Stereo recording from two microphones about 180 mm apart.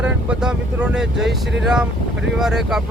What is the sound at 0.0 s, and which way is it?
Speech, 5° right (ahead or behind).